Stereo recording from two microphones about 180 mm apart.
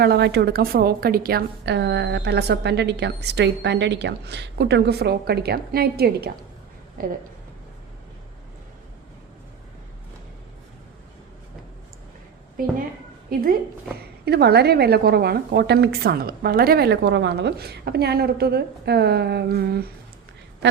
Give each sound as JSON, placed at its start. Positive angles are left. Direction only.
{"t": 0.0, "sound": "a woman's voice", "side_deg": -65}
{"t": 12.6, "sound": "speech", "side_deg": -50}
{"t": 14.3, "sound": "a woman's voice", "side_deg": -65}